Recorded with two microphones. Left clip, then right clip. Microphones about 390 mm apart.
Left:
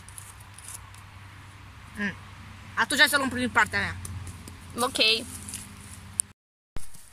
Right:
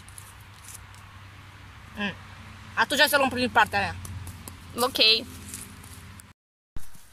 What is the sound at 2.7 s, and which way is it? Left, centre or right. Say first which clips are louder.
Speech: even; centre.